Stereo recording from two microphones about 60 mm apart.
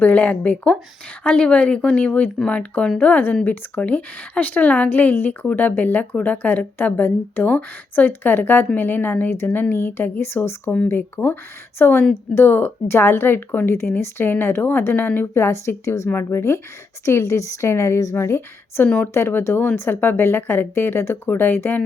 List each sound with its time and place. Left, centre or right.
0.0 s speech: left
15.4 s speech: left